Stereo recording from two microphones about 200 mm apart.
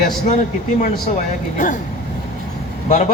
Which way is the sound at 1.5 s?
40° left (ahead or behind).